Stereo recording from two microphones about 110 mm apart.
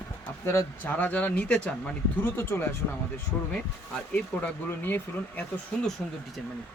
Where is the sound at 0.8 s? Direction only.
15° left (ahead or behind).